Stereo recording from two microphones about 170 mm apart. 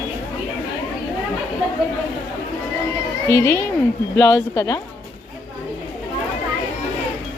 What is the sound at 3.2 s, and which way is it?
Speech, 15° left (ahead or behind).